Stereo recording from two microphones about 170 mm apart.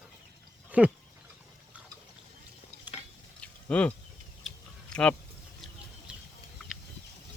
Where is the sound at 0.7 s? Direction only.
10° right (ahead or behind).